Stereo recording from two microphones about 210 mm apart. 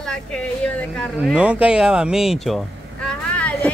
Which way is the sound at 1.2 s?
5° right (ahead or behind).